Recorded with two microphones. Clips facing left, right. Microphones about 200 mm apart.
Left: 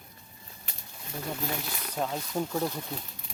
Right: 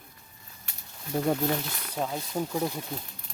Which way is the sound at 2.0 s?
Centre (ahead or behind).